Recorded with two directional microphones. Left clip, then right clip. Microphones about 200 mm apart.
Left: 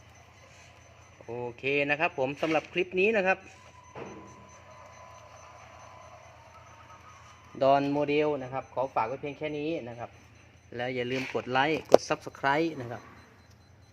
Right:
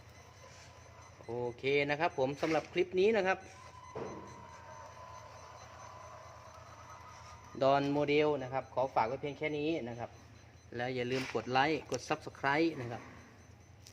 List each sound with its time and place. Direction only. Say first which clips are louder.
1.4 s speech: left 3 dB; 40° left (ahead or behind)
7.6 s speech: left 5 dB; 40° left (ahead or behind)